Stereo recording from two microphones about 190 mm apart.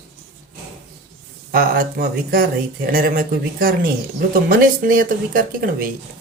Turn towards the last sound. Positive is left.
turn(degrees=-50)  # may be behind; listen again after turning